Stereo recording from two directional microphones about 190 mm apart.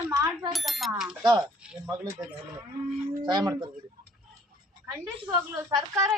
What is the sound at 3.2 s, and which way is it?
Speech, 20° right (ahead or behind).